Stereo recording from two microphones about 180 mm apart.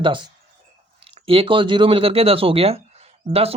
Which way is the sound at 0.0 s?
25° right (ahead or behind).